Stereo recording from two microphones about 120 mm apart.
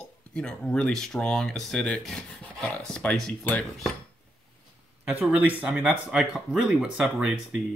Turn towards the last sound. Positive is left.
turn(degrees=-5)  # may be behind; listen again after turning